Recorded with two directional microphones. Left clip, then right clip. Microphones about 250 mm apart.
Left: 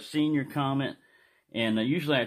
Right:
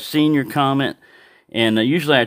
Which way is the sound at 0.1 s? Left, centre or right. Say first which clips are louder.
Right 11 dB; right.